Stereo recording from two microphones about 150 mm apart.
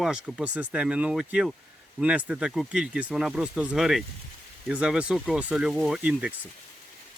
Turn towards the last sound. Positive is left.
turn(degrees=-5)  # may be behind; listen again after turning